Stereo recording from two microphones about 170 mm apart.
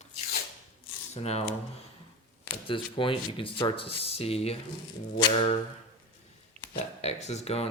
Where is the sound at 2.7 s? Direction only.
30° left (ahead or behind).